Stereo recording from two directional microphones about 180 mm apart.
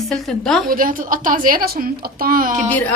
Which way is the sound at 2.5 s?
10° left (ahead or behind).